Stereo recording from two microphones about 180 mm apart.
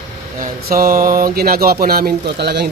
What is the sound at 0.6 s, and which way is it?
Speech, 55° right (ahead or behind).